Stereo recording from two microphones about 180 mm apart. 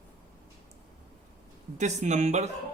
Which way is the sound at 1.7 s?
40° right (ahead or behind).